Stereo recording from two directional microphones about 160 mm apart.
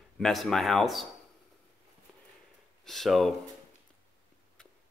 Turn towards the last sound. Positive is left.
turn(degrees=0)  # may be behind; listen again after turning